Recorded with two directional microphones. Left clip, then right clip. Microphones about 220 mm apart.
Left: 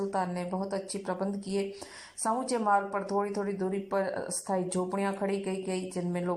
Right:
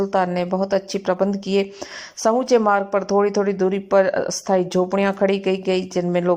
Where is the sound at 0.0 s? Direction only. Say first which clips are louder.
Right 12 dB; 40° right (ahead or behind).